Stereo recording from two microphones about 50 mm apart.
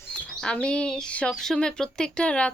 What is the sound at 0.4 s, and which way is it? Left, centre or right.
Speech, centre.